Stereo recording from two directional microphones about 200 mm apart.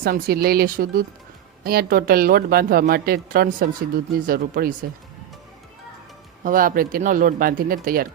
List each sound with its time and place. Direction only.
0.0 s speech: 50° right (ahead or behind)
6.4 s speech: 45° right (ahead or behind)